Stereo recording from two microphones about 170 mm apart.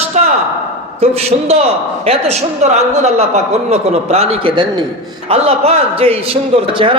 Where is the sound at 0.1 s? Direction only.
45° right (ahead or behind).